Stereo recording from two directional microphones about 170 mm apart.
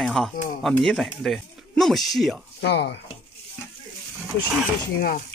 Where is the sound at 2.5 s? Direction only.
80° left.